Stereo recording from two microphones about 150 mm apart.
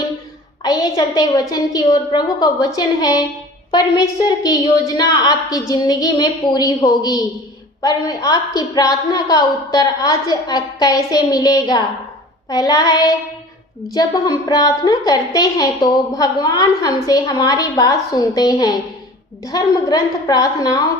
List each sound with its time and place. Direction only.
0.6 s a woman's voice: 25° left (ahead or behind)